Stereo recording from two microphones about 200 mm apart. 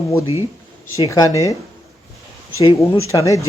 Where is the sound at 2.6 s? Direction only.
15° left (ahead or behind).